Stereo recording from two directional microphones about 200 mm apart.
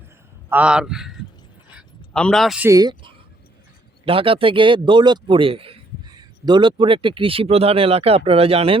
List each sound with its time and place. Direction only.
0.5 s a man's voice: 5° right (ahead or behind)
2.6 s speech: 20° right (ahead or behind)